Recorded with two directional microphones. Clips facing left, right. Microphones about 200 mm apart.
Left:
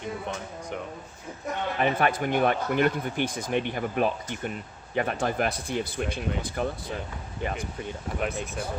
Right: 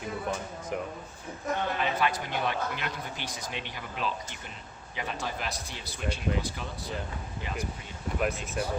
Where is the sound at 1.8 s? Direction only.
55° left (ahead or behind).